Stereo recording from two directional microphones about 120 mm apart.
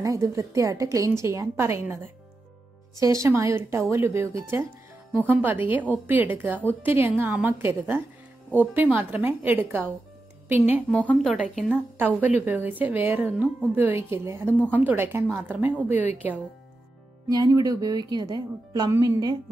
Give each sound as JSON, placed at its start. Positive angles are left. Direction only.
{"t": 0.0, "sound": "a woman's voice", "side_deg": -25}
{"t": 3.0, "sound": "a woman's voice", "side_deg": -25}
{"t": 10.9, "sound": "speech", "side_deg": 10}
{"t": 11.2, "sound": "speech", "side_deg": -5}
{"t": 11.7, "sound": "a woman's voice", "side_deg": -15}
{"t": 17.3, "sound": "speech", "side_deg": -30}